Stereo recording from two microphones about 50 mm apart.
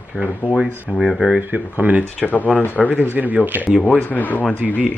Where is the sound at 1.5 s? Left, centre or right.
Right.